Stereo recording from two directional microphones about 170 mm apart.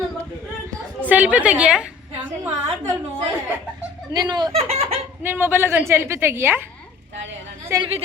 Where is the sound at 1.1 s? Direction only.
10° right (ahead or behind).